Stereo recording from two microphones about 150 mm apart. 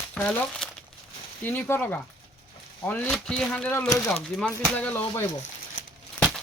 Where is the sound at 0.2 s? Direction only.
10° left (ahead or behind).